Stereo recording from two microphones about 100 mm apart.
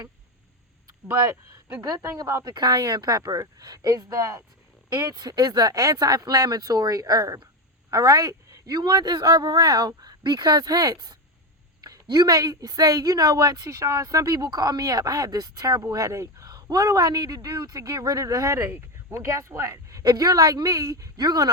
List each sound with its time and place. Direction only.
1.0 s speech: 25° right (ahead or behind)
1.9 s speech: 40° right (ahead or behind)